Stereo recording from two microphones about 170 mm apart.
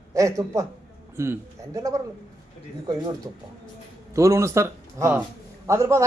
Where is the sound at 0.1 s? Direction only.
20° right (ahead or behind).